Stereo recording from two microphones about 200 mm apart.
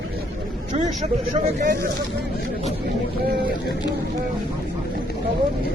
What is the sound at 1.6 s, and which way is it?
Speech, 45° right (ahead or behind).